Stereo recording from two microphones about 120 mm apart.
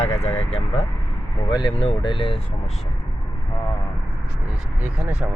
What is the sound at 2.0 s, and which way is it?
Speech, 45° left (ahead or behind).